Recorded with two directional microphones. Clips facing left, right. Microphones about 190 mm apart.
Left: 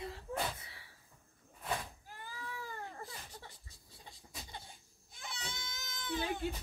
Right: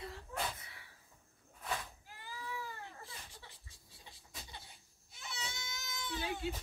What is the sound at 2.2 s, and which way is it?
Baby cry, 50° left (ahead or behind).